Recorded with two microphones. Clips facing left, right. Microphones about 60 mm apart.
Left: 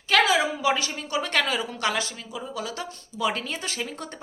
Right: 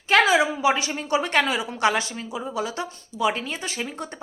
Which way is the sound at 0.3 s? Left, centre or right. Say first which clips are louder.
Right 3 dB; centre.